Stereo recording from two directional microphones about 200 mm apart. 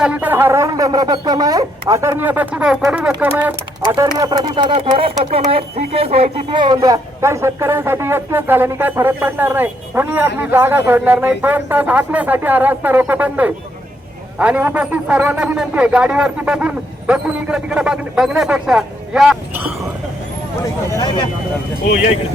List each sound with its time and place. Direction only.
0.0 s speech: 5° right (ahead or behind)
4.7 s a man's voice: 30° right (ahead or behind); by 19.6 s centre (ahead or behind)
20.9 s speech: 20° left (ahead or behind)